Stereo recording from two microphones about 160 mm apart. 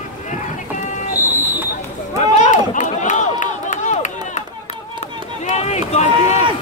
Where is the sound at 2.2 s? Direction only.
45° left (ahead or behind).